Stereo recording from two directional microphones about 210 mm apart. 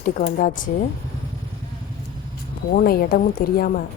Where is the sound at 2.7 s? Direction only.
45° left (ahead or behind).